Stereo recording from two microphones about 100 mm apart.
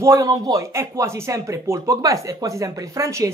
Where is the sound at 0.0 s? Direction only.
35° right (ahead or behind).